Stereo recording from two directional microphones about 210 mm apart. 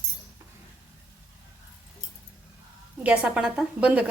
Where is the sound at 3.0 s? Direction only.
5° right (ahead or behind).